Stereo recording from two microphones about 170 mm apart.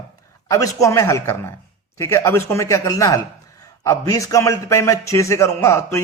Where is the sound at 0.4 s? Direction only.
20° left (ahead or behind).